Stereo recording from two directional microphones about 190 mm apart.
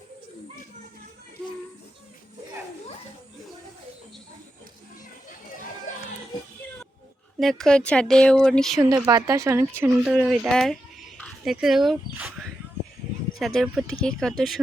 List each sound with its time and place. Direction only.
7.3 s speech: centre (ahead or behind)
9.0 s speech: 15° right (ahead or behind)
10.0 s speech: centre (ahead or behind)
11.2 s a sound: centre (ahead or behind)
13.4 s speech: centre (ahead or behind)